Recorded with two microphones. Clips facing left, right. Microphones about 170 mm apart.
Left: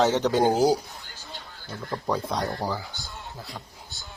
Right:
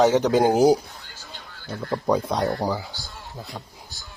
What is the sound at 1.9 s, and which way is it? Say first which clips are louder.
Speech: right 5 dB; 20° right (ahead or behind).